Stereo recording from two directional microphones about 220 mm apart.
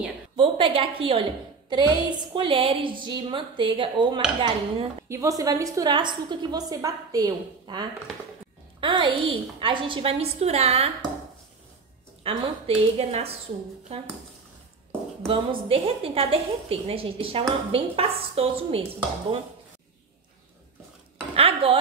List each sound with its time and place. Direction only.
0.4 s a woman's voice: 25° right (ahead or behind)
12.2 s a woman's voice: 25° right (ahead or behind)
15.2 s a woman's voice: 25° right (ahead or behind)
21.4 s a woman's voice: 25° right (ahead or behind)